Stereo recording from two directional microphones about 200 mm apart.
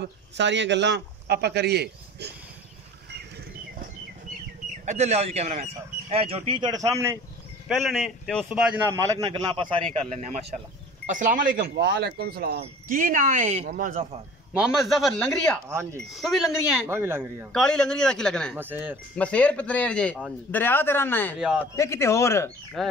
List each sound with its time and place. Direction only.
0.0 s a man's voice: 65° right (ahead or behind)
4.8 s speech: 35° right (ahead or behind); by 7.2 s 15° right (ahead or behind)
7.6 s a man's voice: 5° left (ahead or behind); by 9.8 s 25° right (ahead or behind)
9.9 s speech: 35° right (ahead or behind)
14.5 s a man's voice: 5° right (ahead or behind)
15.7 s a man's voice: 15° right (ahead or behind)
16.1 s a man's voice: centre (ahead or behind)
17.5 s a man's voice: 5° left (ahead or behind)
18.6 s a man's voice: 10° right (ahead or behind)
19.1 s speech: 5° left (ahead or behind)
21.4 s a man's voice: 5° right (ahead or behind)
21.7 s speech: 15° left (ahead or behind)
22.8 s a man's voice: centre (ahead or behind)